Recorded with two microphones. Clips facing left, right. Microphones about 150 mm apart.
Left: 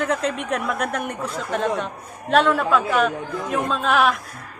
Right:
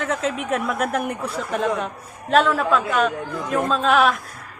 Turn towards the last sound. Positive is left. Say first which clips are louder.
# right 2 dB
turn(degrees=0)  # may be behind; listen again after turning